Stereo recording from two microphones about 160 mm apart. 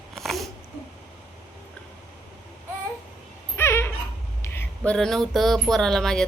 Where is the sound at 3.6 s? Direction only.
15° left (ahead or behind).